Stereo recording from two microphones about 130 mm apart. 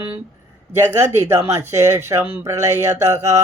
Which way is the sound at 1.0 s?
20° right (ahead or behind).